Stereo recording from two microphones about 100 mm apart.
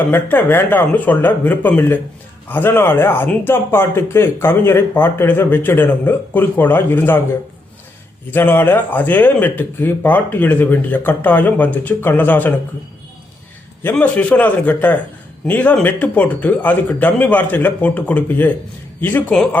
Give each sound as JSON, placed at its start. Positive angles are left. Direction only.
{"t": 0.1, "sound": "speech", "side_deg": 20}
{"t": 8.3, "sound": "speech", "side_deg": 20}
{"t": 14.0, "sound": "a man's voice", "side_deg": 15}